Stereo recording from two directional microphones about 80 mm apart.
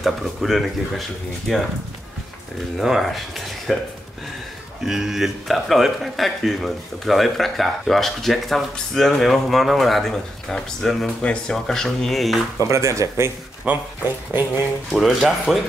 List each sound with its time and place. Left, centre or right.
0.0 s speech: centre
2.8 s speech: centre
4.8 s speech: centre
12.5 s speech: right
13.7 s speech: right
14.9 s speech: centre